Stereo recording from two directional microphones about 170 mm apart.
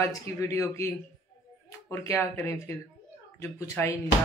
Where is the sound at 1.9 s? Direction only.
15° left (ahead or behind).